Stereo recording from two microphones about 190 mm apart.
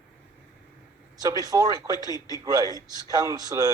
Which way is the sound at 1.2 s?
20° right (ahead or behind).